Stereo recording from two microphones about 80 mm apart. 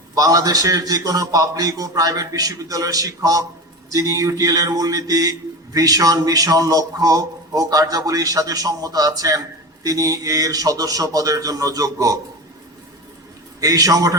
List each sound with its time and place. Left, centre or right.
0.1 s a man's voice: right
13.6 s a man's voice: right